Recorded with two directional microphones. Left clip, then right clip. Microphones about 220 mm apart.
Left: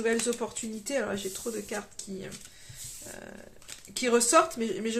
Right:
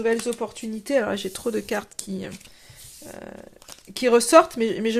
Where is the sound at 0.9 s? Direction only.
45° right (ahead or behind).